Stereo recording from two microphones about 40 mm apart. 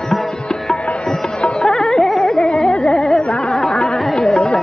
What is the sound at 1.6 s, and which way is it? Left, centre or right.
Carnatic music, centre.